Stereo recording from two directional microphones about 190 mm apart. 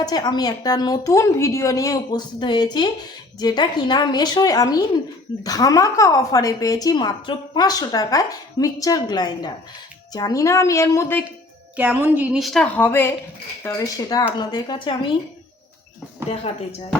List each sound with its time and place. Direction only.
0.0 s a woman's voice: 20° left (ahead or behind)
11.8 s a woman's voice: 10° right (ahead or behind); by 15.1 s 25° left (ahead or behind)
16.5 s speech: 35° left (ahead or behind)